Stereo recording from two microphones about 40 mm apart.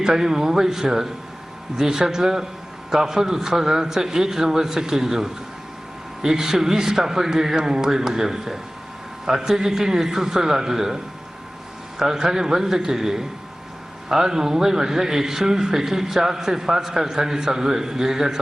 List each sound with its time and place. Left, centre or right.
0.0 s a man's voice: centre